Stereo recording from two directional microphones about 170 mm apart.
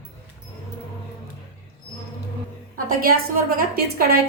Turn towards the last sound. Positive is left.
turn(degrees=-65)  # may be behind; listen again after turning